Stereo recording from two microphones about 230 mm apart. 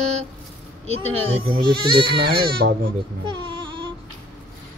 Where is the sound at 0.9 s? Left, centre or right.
Right.